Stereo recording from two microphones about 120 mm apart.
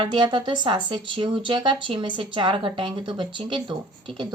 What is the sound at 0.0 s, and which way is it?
Speech, 40° right (ahead or behind).